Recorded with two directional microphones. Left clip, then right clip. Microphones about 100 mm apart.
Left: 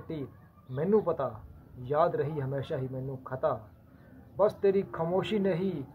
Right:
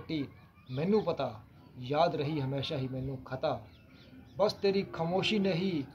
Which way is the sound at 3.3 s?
35° left (ahead or behind).